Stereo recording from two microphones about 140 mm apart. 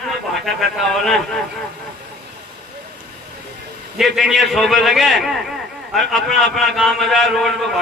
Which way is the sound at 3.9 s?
Centre (ahead or behind).